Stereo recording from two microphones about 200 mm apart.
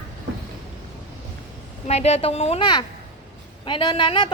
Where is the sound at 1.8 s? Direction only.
30° left (ahead or behind).